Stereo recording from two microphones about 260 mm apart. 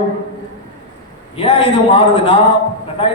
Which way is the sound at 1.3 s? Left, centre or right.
Left.